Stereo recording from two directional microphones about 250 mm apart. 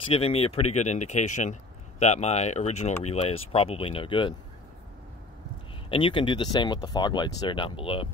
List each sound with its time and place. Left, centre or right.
0.1 s speech: left
5.9 s speech: left